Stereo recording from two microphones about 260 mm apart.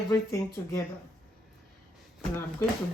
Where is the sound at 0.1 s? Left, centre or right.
Centre.